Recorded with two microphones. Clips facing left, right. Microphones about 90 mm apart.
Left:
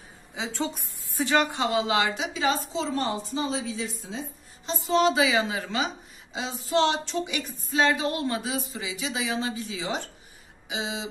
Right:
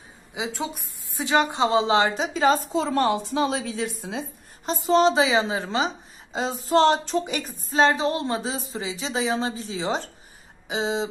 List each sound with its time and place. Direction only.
0.3 s a woman's voice: 15° right (ahead or behind); by 4.2 s 65° right (ahead or behind)
4.6 s speech: 35° right (ahead or behind)
6.3 s speech: 40° right (ahead or behind)